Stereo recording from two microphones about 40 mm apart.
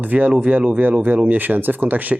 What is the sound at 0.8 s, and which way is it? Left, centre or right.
Speech, right.